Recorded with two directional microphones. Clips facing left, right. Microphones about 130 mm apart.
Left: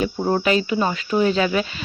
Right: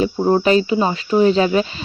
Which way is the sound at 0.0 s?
25° right (ahead or behind).